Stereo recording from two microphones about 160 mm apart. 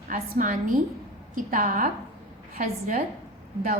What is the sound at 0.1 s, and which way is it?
A woman's voice, 55° right (ahead or behind).